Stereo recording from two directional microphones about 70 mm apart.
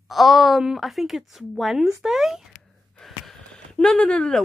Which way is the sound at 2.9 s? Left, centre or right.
Centre.